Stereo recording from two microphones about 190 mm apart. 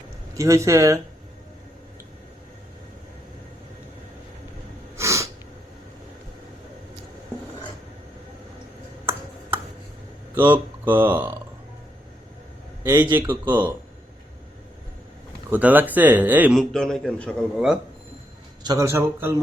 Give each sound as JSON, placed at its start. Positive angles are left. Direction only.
{"t": 0.3, "sound": "a man's voice", "side_deg": -15}
{"t": 4.9, "sound": "a sound", "side_deg": -15}
{"t": 10.8, "sound": "a man's voice", "side_deg": -10}
{"t": 12.8, "sound": "a man's voice", "side_deg": -10}
{"t": 15.4, "sound": "a man's voice", "side_deg": -10}
{"t": 18.6, "sound": "a man's voice", "side_deg": -20}